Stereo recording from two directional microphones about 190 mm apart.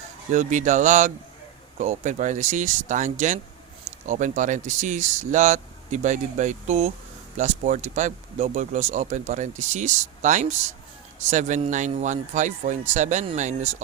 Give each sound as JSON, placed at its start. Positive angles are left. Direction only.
{"t": 0.3, "sound": "speech", "side_deg": -40}